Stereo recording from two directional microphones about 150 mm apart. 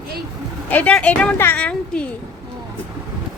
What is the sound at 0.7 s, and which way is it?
A woman's voice, 10° left (ahead or behind).